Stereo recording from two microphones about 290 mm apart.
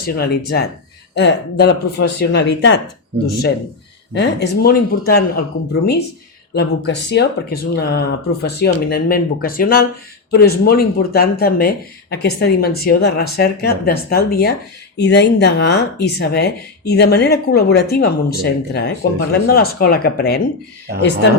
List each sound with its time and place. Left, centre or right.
0.0 s speech: left
4.1 s speech: left